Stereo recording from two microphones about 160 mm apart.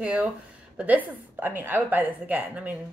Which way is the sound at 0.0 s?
5° right (ahead or behind).